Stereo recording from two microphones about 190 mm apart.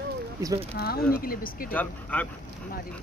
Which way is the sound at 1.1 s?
50° left (ahead or behind).